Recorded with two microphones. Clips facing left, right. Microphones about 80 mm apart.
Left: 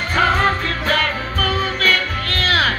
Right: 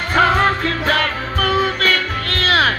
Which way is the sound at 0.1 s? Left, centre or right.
Right.